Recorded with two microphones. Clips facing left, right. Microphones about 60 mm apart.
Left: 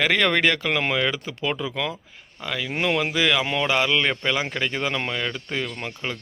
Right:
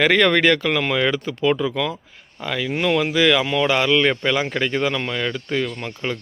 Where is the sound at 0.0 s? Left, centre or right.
Centre.